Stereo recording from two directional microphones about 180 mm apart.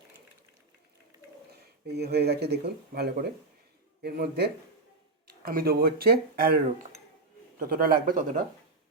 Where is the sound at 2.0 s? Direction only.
65° right (ahead or behind).